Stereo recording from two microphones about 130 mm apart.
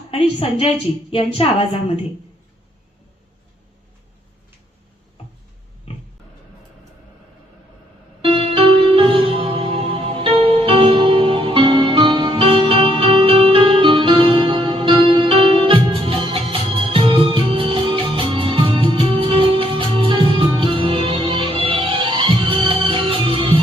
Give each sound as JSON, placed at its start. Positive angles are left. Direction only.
{"t": 0.1, "sound": "a woman's voice", "side_deg": 45}
{"t": 5.9, "sound": "pig", "side_deg": 50}
{"t": 8.2, "sound": "music", "side_deg": -45}